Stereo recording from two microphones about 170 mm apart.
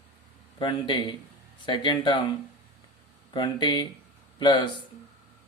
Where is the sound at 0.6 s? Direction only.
30° left (ahead or behind).